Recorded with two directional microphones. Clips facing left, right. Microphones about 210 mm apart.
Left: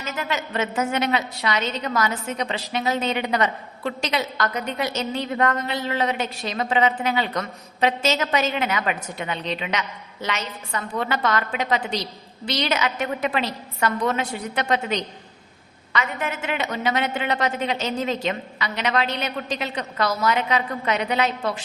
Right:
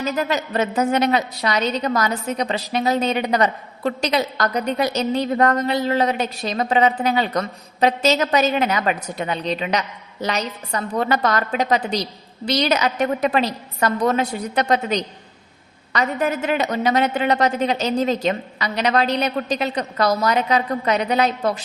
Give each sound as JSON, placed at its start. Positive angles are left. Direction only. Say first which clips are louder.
{"t": 0.0, "sound": "a woman's voice", "louder": "right 6 dB", "side_deg": -40}